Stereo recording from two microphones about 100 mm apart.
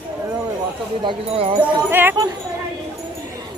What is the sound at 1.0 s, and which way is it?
Speech, 60° right (ahead or behind).